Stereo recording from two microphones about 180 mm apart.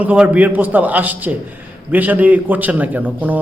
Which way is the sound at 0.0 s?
10° right (ahead or behind).